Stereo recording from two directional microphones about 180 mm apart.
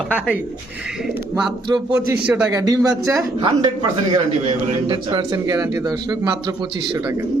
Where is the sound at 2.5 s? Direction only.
20° right (ahead or behind).